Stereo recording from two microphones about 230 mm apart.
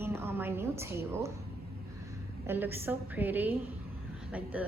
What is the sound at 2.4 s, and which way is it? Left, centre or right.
A woman's voice, centre.